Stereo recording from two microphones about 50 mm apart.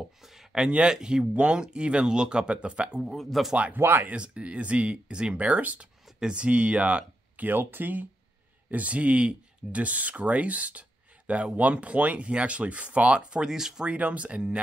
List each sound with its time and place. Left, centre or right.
0.2 s a sound: centre
0.7 s speech: centre
3.1 s speech: centre
3.7 s speech: right
4.1 s speech: right
6.1 s speech: centre
7.4 s speech: right
13.5 s speech: centre
13.8 s speech: right